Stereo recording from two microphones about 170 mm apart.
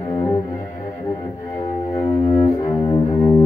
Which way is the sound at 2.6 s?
25° left (ahead or behind).